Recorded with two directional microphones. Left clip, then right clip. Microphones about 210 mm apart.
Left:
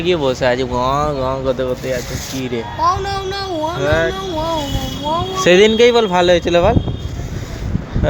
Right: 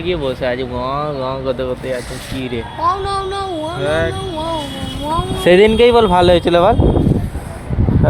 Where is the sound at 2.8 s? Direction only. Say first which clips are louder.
Even; 50° left (ahead or behind).